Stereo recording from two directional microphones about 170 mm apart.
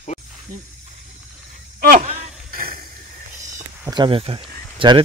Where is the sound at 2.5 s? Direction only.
55° right (ahead or behind).